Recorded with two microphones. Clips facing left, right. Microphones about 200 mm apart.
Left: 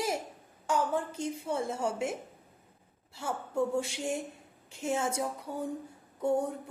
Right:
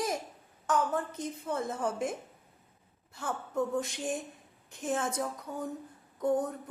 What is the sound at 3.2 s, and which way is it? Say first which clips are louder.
A woman's voice: left 1 dB; 10° left (ahead or behind).